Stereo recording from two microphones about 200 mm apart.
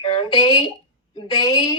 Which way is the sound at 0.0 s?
25° left (ahead or behind).